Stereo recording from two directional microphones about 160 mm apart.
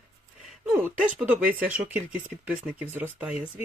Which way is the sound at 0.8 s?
10° right (ahead or behind).